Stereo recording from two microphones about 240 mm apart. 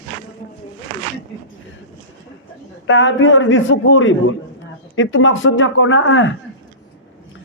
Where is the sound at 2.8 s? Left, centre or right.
Left.